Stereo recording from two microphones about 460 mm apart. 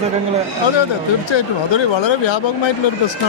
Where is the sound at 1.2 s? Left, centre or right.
Left.